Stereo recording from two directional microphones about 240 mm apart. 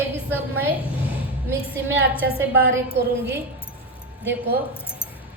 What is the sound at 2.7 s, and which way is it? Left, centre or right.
Speech, right.